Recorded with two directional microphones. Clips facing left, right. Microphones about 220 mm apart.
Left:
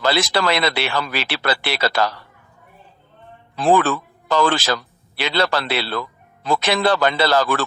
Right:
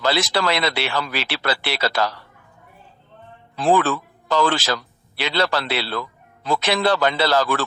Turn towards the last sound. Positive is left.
turn(degrees=50)  # may be behind; listen again after turning